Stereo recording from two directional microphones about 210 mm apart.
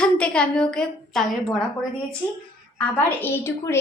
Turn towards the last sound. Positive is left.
turn(degrees=10)  # may be behind; listen again after turning